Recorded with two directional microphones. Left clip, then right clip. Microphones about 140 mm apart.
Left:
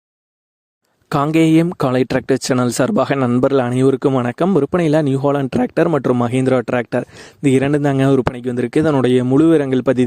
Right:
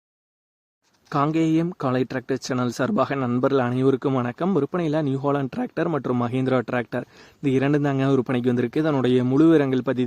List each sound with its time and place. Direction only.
1.1 s speech: 85° left
1.6 s speech: 70° left (ahead or behind)
3.2 s speech: 50° left (ahead or behind)
3.4 s speech: 70° left (ahead or behind)